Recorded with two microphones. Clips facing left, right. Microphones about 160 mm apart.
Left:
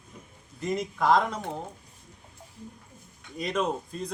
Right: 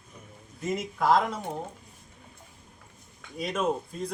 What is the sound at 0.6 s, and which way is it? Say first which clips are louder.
Speech: left 1 dB; 5° right (ahead or behind).